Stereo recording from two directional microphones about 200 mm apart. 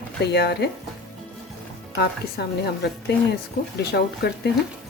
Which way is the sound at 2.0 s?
55° left (ahead or behind).